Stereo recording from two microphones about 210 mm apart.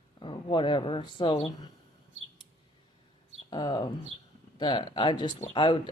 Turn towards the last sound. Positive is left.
turn(degrees=25)  # may be behind; listen again after turning